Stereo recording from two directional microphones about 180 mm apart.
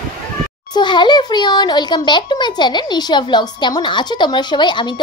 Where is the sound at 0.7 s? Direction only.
25° left (ahead or behind).